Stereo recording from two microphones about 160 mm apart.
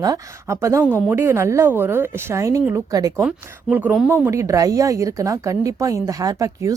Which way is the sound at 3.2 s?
10° right (ahead or behind).